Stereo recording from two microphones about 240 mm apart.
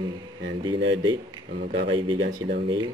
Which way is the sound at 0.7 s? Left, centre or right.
Right.